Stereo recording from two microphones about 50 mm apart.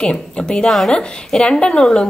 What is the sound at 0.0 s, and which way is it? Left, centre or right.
Speech, centre.